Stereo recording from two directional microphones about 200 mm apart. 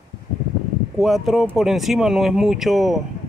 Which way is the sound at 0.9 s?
Centre (ahead or behind).